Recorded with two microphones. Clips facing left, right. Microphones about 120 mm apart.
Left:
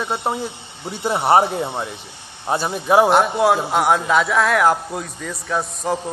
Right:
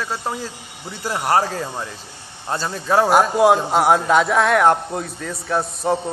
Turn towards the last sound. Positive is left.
turn(degrees=0)  # may be behind; listen again after turning